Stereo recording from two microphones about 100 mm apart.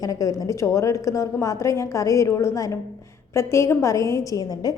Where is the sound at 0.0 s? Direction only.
35° left (ahead or behind).